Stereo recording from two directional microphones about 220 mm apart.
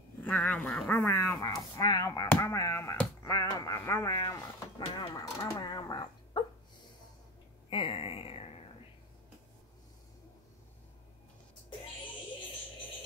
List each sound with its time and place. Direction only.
0.2 s speech: 5° left (ahead or behind)
4.8 s dog: 20° left (ahead or behind)
7.7 s a sound: 25° left (ahead or behind)